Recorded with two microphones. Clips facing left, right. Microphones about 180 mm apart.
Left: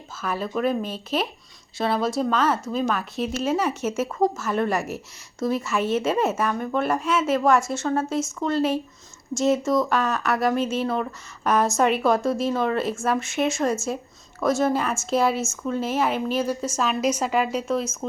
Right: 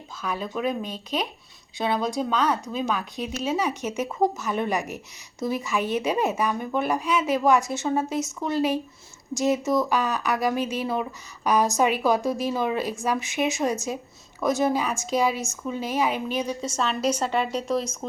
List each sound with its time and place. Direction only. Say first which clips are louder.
0.2 s speech: left 3 dB; 5° left (ahead or behind)